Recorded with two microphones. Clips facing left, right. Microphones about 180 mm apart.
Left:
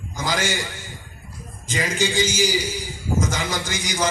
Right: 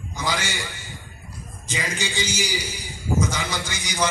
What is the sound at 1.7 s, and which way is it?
A man's voice, 50° left (ahead or behind).